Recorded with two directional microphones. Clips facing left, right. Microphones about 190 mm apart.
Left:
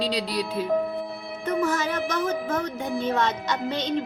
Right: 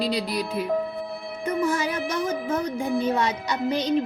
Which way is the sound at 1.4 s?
10° right (ahead or behind).